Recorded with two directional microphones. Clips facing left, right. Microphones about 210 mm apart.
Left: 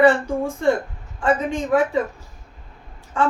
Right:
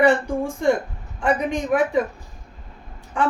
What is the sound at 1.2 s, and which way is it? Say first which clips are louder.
Speech: left 1 dB; 15° right (ahead or behind).